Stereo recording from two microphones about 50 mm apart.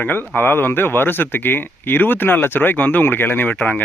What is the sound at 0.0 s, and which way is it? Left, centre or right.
Speech, left.